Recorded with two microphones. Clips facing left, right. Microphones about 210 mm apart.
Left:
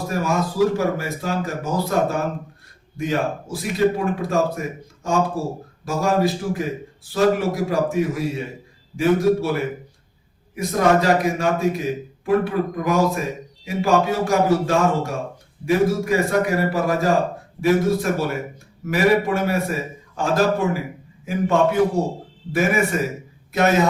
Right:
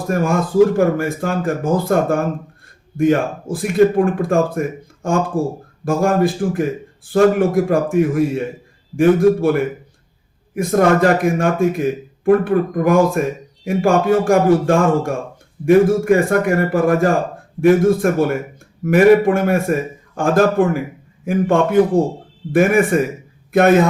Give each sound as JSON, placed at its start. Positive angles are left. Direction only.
{"t": 0.1, "sound": "a man's voice", "side_deg": -55}